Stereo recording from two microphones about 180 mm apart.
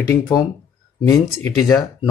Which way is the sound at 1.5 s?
15° left (ahead or behind).